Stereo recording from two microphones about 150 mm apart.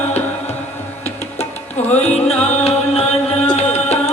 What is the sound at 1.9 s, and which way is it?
Music, 45° left (ahead or behind).